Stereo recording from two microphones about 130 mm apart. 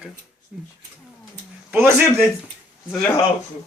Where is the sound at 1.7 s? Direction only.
15° right (ahead or behind).